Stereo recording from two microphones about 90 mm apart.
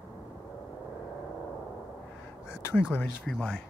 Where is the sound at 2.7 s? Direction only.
20° left (ahead or behind).